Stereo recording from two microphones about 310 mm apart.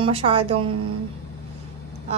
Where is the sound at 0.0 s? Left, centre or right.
Centre.